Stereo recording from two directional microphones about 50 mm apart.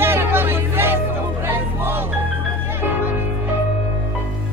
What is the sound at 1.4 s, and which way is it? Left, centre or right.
Music, right.